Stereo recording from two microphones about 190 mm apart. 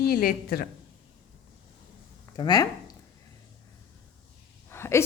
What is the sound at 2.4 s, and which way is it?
Speech, 20° left (ahead or behind).